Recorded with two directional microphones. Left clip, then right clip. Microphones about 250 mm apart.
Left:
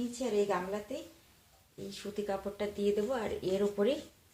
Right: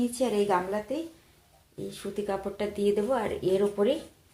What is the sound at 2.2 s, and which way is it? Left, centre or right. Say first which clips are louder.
Speech: right 5 dB; right.